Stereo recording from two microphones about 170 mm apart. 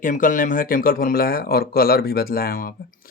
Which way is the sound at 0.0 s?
50° left (ahead or behind).